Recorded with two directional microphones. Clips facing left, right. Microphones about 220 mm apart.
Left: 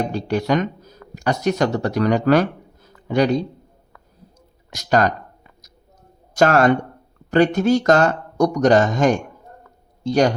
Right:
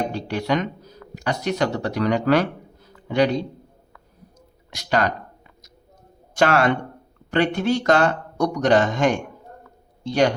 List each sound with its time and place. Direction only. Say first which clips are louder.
0.1 s speech: left 3 dB; 45° left (ahead or behind)
4.7 s speech: left 4 dB; 45° left (ahead or behind)
6.3 s a man's voice: left 4 dB; 45° left (ahead or behind)